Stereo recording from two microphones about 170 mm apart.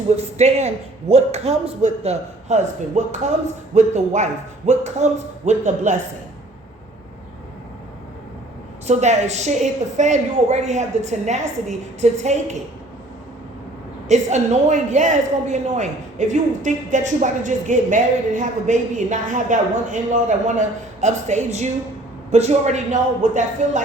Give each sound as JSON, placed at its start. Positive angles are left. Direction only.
{"t": 0.1, "sound": "a man's voice", "side_deg": -40}
{"t": 8.9, "sound": "a man's voice", "side_deg": -40}
{"t": 14.1, "sound": "a man's voice", "side_deg": -40}